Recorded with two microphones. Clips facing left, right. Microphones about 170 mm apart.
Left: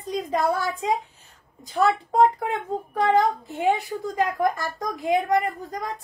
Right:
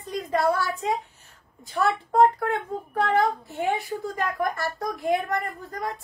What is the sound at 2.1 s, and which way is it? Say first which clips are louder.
A woman's voice: right 3 dB; 15° left (ahead or behind).